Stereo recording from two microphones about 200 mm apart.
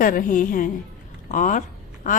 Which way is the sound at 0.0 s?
45° left (ahead or behind).